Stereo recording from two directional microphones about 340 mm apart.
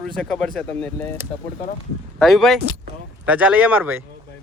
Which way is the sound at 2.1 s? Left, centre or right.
Centre.